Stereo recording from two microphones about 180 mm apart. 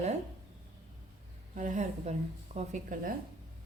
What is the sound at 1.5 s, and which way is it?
A woman's voice, 45° right (ahead or behind).